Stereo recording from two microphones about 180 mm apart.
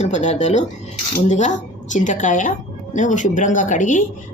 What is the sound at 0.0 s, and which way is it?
Speech, 40° left (ahead or behind).